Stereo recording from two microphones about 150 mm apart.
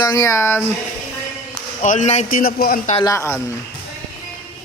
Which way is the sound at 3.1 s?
20° left (ahead or behind).